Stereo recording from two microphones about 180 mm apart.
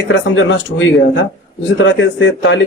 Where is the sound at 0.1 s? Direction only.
90° left.